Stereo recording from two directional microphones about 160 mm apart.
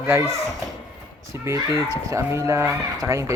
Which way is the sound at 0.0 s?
15° right (ahead or behind).